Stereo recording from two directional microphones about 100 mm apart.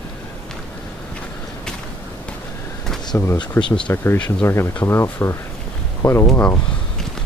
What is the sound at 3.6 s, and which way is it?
Speech, 50° left (ahead or behind).